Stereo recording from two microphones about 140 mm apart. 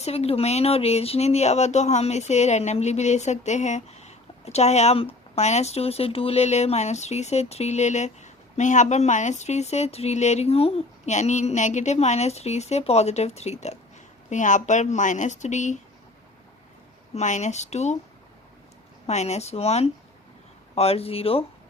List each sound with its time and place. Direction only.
0.0 s speech: 45° left (ahead or behind)
14.3 s speech: 65° left (ahead or behind)
17.2 s speech: 60° left (ahead or behind)
19.0 s speech: 55° left (ahead or behind)